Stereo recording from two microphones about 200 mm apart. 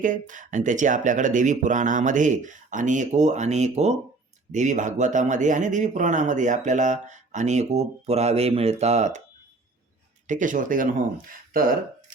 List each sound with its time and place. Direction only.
0.0 s speech: 40° right (ahead or behind)
10.2 s speech: 40° right (ahead or behind)